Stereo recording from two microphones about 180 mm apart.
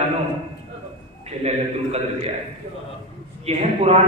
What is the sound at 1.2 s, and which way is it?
A man's voice, 35° right (ahead or behind).